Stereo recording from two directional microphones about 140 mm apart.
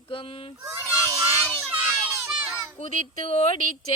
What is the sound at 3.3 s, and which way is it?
Music, 45° left (ahead or behind).